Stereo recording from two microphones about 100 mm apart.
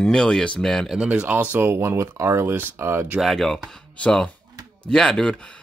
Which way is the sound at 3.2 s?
5° left (ahead or behind).